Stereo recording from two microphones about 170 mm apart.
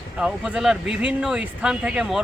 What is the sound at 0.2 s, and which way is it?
Speech, 5° right (ahead or behind).